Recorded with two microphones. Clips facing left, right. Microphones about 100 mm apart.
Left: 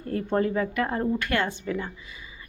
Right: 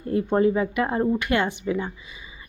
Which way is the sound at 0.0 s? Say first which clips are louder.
Right 5 dB; 15° right (ahead or behind).